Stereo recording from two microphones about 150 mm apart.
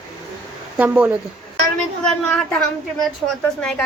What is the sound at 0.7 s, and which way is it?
Speech, 10° right (ahead or behind).